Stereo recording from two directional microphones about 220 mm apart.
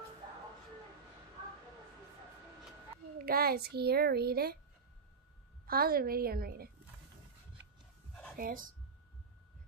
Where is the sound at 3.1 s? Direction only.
40° right (ahead or behind).